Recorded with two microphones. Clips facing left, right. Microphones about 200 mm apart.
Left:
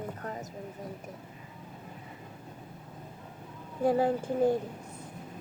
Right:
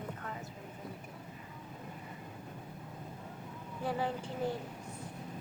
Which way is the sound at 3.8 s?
40° left (ahead or behind).